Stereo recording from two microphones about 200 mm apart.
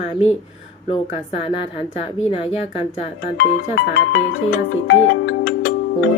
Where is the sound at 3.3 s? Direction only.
65° left (ahead or behind).